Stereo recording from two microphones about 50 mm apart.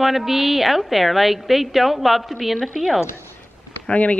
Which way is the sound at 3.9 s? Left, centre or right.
Left.